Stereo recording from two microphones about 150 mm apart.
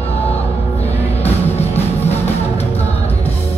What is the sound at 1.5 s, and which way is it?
Music, 45° left (ahead or behind).